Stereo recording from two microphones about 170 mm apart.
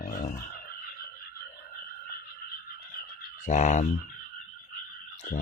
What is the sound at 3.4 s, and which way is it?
Speech, 45° left (ahead or behind).